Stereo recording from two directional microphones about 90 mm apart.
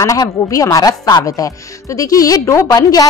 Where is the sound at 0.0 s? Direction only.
40° left (ahead or behind).